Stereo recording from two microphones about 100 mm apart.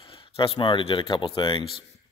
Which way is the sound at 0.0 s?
60° left (ahead or behind).